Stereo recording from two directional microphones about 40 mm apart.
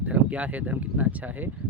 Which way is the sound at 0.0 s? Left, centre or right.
Right.